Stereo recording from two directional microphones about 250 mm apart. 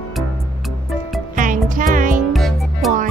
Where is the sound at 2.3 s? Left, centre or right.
Centre.